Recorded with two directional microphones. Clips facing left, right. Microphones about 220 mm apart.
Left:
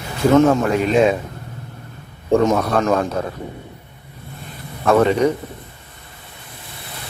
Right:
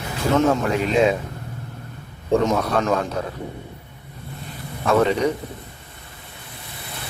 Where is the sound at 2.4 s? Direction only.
50° left (ahead or behind).